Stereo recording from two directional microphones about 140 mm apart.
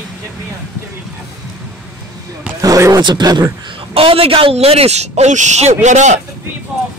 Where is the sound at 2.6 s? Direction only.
25° right (ahead or behind); by 6.2 s 55° right (ahead or behind).